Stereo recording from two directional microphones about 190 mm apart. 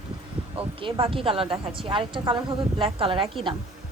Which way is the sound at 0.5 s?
30° right (ahead or behind).